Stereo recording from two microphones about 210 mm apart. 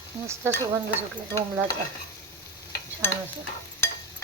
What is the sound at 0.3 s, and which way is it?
Stir, 15° right (ahead or behind).